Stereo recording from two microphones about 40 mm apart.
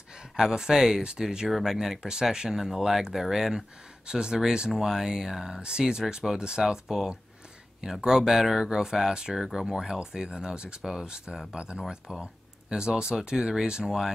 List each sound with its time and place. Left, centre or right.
0.4 s speech: centre
13.8 s speech: centre